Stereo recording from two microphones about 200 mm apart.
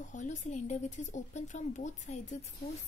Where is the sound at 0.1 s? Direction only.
40° left (ahead or behind).